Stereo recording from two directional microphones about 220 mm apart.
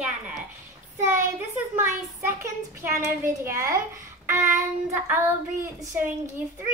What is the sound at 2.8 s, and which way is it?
A child's voice, 10° right (ahead or behind).